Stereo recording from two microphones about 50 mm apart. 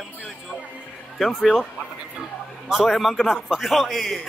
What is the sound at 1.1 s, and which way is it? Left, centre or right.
Speech, centre.